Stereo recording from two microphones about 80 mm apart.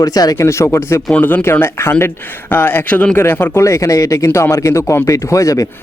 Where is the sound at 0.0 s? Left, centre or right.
Left.